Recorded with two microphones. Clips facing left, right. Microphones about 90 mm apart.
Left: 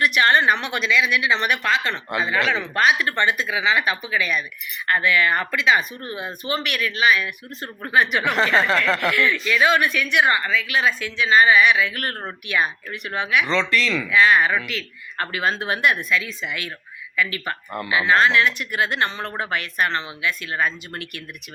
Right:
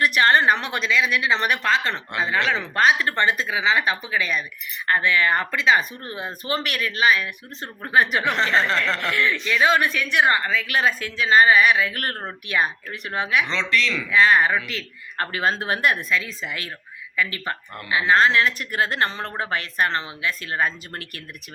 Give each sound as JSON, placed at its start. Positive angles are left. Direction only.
{"t": 0.0, "sound": "speech", "side_deg": -35}
{"t": 2.0, "sound": "speech", "side_deg": 5}
{"t": 2.5, "sound": "speech", "side_deg": -35}
{"t": 8.2, "sound": "speech", "side_deg": 5}
{"t": 9.1, "sound": "speech", "side_deg": -35}
{"t": 13.4, "sound": "speech", "side_deg": 0}
{"t": 14.1, "sound": "speech", "side_deg": -35}